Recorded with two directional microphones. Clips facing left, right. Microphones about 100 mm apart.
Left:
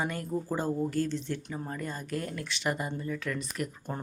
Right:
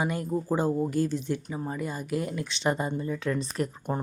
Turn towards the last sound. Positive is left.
turn(degrees=-30)  # may be behind; listen again after turning